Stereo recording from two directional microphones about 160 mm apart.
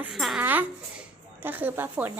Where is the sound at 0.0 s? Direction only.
Centre (ahead or behind).